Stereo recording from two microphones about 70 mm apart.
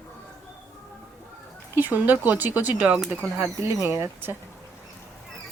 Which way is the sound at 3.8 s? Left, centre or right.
Right.